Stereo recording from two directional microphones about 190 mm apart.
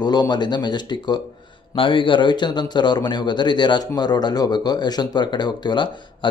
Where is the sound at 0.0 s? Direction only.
20° left (ahead or behind).